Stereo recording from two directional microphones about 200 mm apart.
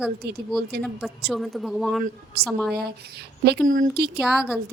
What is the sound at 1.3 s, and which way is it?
Speech, centre (ahead or behind).